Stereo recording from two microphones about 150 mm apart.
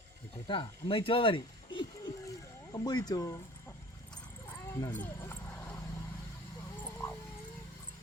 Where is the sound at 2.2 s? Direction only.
25° left (ahead or behind).